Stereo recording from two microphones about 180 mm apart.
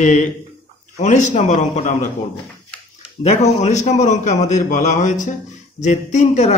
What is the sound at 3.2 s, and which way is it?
Speech, 40° left (ahead or behind).